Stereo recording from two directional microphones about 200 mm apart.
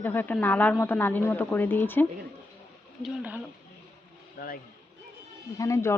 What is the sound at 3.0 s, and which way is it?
Speech, 5° right (ahead or behind).